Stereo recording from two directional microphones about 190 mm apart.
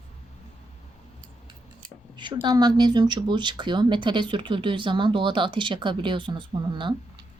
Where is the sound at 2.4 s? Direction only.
20° right (ahead or behind).